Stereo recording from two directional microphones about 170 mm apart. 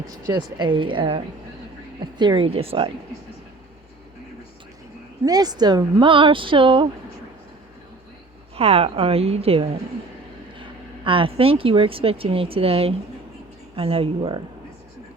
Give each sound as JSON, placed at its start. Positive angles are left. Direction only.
{"t": 0.3, "sound": "speech", "side_deg": -25}
{"t": 5.2, "sound": "speech", "side_deg": -25}
{"t": 8.5, "sound": "a woman's voice", "side_deg": -35}